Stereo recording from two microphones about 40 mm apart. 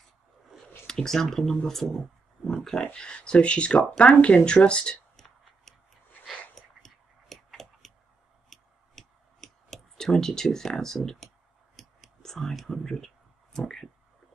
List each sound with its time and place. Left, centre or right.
0.8 s speech: centre
6.8 s tick-tock: centre
8.5 s a sound: centre
9.9 s speech: centre
11.8 s clicking: centre
12.2 s speech: centre